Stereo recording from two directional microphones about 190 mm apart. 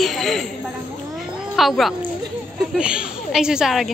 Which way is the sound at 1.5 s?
Centre (ahead or behind).